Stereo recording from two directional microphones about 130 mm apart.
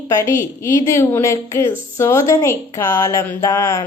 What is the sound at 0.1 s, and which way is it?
A woman's voice, 20° left (ahead or behind).